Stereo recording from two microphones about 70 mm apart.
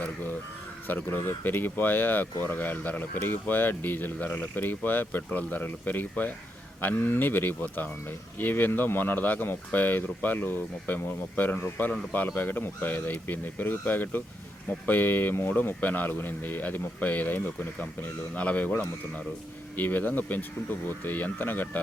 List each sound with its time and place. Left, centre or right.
0.9 s speech: left